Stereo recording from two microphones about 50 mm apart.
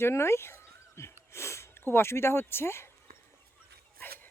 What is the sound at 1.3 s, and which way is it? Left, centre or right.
Speech, left.